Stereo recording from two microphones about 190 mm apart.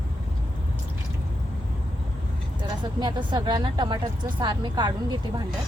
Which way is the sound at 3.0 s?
25° right (ahead or behind).